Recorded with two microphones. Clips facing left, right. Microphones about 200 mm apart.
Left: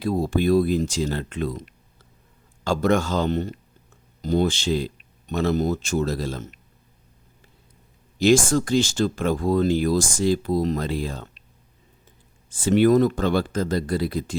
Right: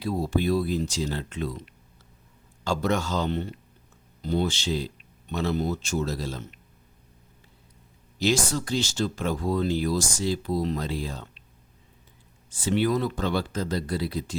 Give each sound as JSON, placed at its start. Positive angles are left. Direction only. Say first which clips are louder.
{"t": 0.0, "sound": "speech", "louder": "left 4 dB", "side_deg": 50}
{"t": 2.6, "sound": "speech", "louder": "left 5 dB", "side_deg": 50}
{"t": 8.2, "sound": "speech", "louder": "left 7 dB", "side_deg": 50}
{"t": 12.5, "sound": "speech", "louder": "left 7 dB", "side_deg": 50}